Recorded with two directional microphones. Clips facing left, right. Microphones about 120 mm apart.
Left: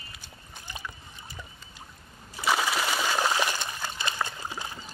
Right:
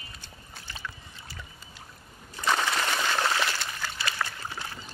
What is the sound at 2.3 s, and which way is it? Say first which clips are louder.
Water: even; 5° left (ahead or behind).